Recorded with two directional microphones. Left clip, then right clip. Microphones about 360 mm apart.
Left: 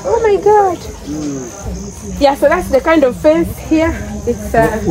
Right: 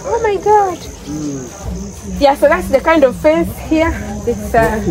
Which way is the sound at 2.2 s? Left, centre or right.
Centre.